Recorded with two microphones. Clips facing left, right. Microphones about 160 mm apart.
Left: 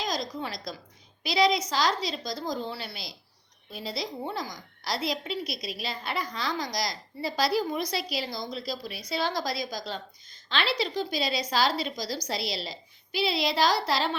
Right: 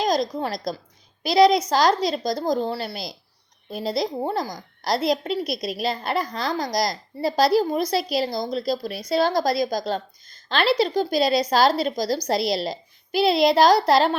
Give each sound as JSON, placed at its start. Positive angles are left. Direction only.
{"t": 0.0, "sound": "a woman's voice", "side_deg": -45}